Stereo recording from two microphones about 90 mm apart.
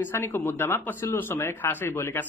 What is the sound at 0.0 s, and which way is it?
Speech, 25° left (ahead or behind).